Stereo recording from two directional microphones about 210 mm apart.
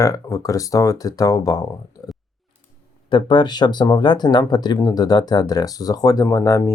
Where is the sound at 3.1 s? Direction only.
20° left (ahead or behind).